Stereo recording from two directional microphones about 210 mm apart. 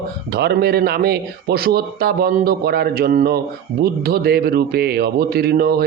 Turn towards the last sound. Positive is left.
turn(degrees=-50)  # may be behind; listen again after turning